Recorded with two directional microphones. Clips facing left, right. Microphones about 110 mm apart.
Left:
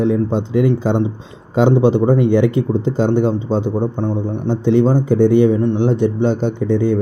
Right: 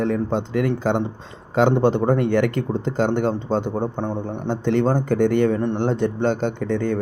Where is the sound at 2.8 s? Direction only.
65° right (ahead or behind).